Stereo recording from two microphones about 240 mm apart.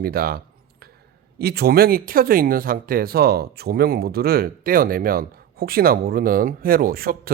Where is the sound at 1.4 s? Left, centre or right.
Right.